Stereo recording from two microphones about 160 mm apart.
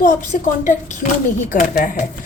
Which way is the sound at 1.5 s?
55° left (ahead or behind).